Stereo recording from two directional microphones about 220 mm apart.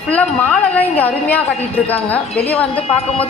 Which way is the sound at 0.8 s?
5° left (ahead or behind).